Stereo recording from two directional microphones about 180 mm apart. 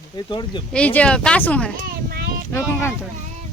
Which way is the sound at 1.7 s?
55° right (ahead or behind).